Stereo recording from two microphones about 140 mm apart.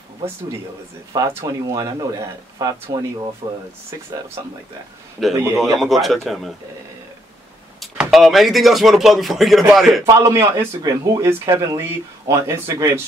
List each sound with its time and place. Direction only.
1.1 s speech: 20° right (ahead or behind)
4.4 s speech: 25° right (ahead or behind)
5.2 s speech: centre (ahead or behind)
7.8 s speech: centre (ahead or behind)
10.0 s speech: 20° right (ahead or behind)